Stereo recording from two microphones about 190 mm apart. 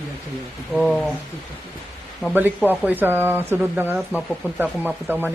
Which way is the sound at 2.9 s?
10° right (ahead or behind).